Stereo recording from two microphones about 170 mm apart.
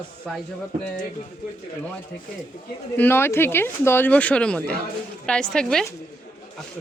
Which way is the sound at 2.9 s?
10° left (ahead or behind).